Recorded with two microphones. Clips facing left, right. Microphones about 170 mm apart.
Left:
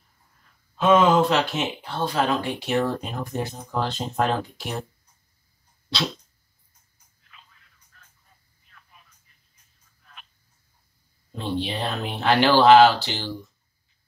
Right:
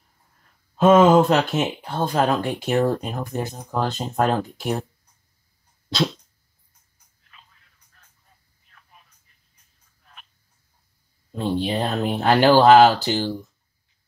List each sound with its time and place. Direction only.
0.7 s speech: 45° right (ahead or behind)
5.9 s speech: 45° right (ahead or behind)
11.3 s speech: 45° right (ahead or behind)